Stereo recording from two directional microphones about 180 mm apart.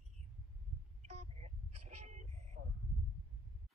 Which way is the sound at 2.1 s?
40° right (ahead or behind).